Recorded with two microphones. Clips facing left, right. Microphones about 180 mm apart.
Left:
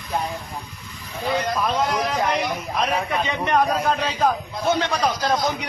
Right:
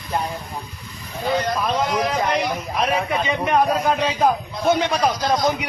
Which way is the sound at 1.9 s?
Centre (ahead or behind).